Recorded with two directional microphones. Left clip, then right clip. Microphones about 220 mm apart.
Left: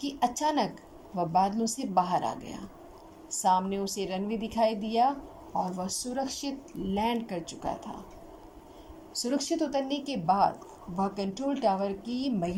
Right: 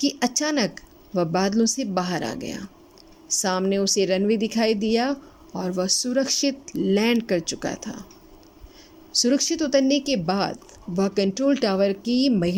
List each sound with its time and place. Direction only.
0.0 s speech: 50° right (ahead or behind)
9.2 s speech: 50° right (ahead or behind)